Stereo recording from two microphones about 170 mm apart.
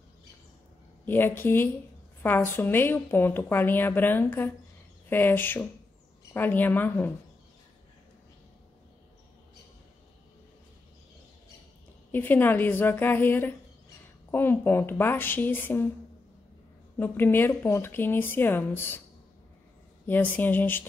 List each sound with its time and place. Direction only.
1.0 s a woman's voice: 10° left (ahead or behind)
12.1 s a woman's voice: 10° left (ahead or behind)
16.9 s a woman's voice: 10° left (ahead or behind)
20.1 s a woman's voice: 10° left (ahead or behind)